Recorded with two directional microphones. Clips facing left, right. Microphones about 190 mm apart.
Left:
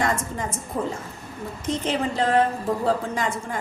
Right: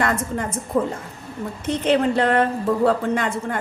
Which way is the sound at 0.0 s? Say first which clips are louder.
Right 3 dB; 60° right (ahead or behind).